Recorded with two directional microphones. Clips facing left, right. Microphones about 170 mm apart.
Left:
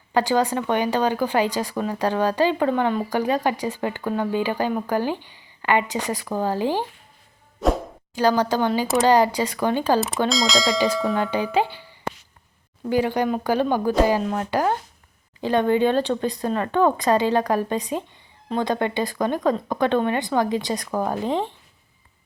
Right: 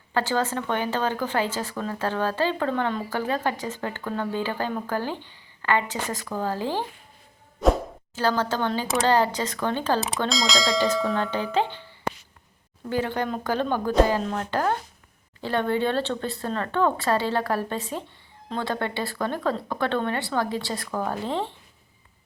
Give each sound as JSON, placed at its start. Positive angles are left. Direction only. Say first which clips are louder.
{"t": 0.1, "sound": "speech", "louder": "left 5 dB", "side_deg": 15}
{"t": 8.1, "sound": "speech", "louder": "left 5 dB", "side_deg": 15}
{"t": 10.2, "sound": "speech", "louder": "left 3 dB", "side_deg": 0}
{"t": 12.9, "sound": "speech", "louder": "left 5 dB", "side_deg": 10}